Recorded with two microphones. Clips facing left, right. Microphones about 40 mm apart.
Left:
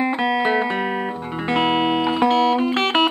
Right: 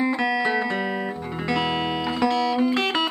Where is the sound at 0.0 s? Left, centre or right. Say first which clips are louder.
Left 3 dB; left.